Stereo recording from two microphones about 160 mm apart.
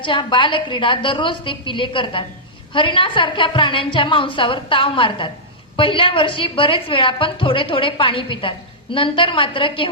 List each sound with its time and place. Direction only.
0.0 s a woman's voice: 30° left (ahead or behind)